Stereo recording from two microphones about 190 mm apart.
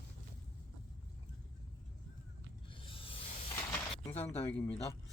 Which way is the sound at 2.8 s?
30° left (ahead or behind).